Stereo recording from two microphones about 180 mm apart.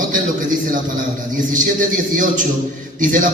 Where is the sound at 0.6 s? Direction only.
45° right (ahead or behind).